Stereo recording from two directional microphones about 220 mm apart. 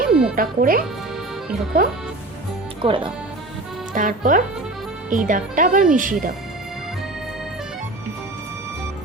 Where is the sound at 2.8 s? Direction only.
25° right (ahead or behind).